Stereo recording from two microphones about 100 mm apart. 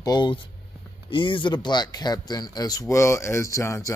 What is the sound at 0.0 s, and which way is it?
Speech, 45° left (ahead or behind).